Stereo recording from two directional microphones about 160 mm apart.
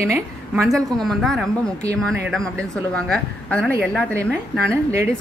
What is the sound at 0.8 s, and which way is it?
A woman's voice, centre (ahead or behind).